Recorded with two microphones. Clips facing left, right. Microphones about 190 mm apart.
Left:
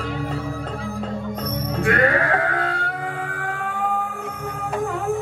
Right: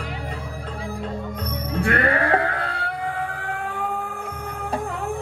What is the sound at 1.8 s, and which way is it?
Music, 35° right (ahead or behind).